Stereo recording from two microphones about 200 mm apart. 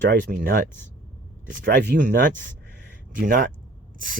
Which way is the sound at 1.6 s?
55° right (ahead or behind).